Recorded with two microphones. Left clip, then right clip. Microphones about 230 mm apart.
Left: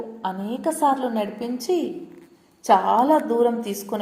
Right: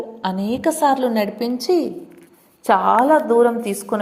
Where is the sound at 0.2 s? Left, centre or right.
Right.